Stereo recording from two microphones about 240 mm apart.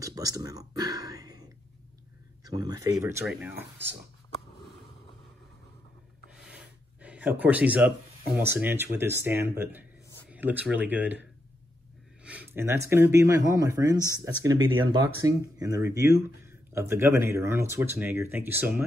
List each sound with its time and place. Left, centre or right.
0.0 s a sound: centre
2.4 s speech: centre
6.4 s gasp: centre
8.4 s speech: centre